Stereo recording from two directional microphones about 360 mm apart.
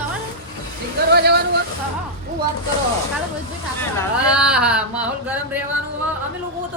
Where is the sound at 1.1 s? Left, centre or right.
Right.